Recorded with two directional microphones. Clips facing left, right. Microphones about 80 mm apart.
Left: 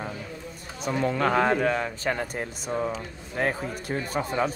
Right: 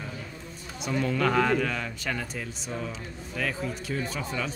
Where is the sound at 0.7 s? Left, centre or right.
Left.